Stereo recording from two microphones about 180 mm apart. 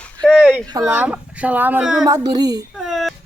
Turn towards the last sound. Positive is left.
turn(degrees=0)  # may be behind; listen again after turning